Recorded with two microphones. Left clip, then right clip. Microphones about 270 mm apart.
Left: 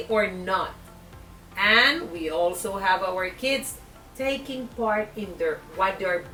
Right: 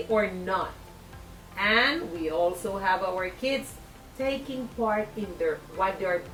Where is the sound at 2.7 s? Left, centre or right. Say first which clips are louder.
Left 3 dB; centre.